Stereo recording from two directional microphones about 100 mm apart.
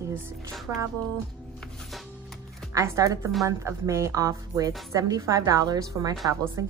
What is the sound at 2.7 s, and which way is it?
Speech, 35° right (ahead or behind).